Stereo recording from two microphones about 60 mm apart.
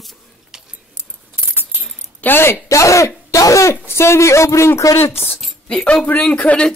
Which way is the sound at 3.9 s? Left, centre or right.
Left.